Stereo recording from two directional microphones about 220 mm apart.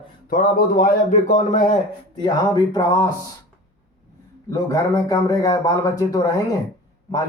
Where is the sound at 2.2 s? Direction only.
20° left (ahead or behind).